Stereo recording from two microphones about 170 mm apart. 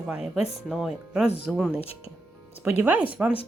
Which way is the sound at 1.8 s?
35° left (ahead or behind).